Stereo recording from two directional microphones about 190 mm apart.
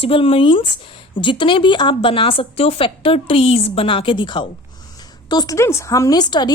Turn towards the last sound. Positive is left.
turn(degrees=20)  # may be behind; listen again after turning